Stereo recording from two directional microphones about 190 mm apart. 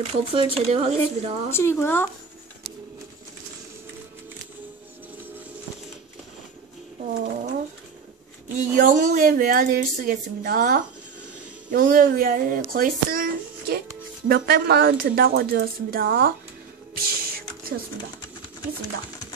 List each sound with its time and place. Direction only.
0.0 s speech: 30° right (ahead or behind)
1.5 s speech: 15° left (ahead or behind)
8.5 s speech: 45° right (ahead or behind)
16.9 s a sound: 50° right (ahead or behind)